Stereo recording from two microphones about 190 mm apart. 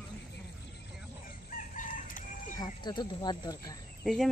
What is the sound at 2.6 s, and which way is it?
Speech, 20° left (ahead or behind).